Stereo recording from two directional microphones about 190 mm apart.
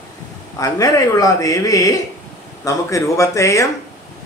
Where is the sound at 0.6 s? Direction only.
15° left (ahead or behind).